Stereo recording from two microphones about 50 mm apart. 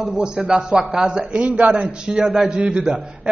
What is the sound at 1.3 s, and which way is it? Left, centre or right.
Speech, right.